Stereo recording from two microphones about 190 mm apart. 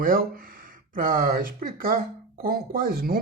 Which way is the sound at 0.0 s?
50° right (ahead or behind).